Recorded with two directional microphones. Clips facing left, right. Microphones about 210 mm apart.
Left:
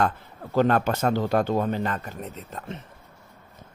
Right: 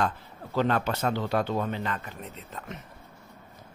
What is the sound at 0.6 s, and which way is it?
Speech, 50° left (ahead or behind).